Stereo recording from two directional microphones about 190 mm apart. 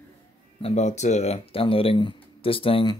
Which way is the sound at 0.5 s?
35° left (ahead or behind).